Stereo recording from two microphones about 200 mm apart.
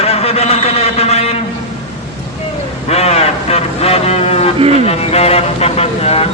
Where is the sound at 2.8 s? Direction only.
30° left (ahead or behind).